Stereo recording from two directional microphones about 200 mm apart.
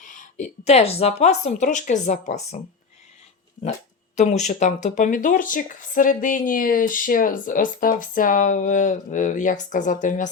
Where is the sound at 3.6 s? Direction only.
35° left (ahead or behind).